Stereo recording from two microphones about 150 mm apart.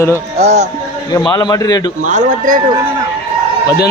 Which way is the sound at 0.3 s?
50° right (ahead or behind).